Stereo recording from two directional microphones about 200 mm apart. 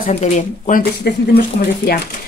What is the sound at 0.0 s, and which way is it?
Speech, 40° left (ahead or behind).